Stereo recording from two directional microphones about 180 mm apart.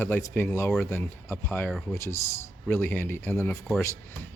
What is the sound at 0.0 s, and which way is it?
Speech, 10° left (ahead or behind).